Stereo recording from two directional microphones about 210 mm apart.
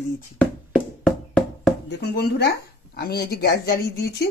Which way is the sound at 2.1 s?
50° left (ahead or behind).